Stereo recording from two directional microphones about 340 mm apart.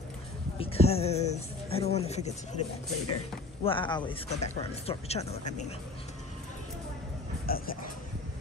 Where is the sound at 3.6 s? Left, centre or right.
Centre.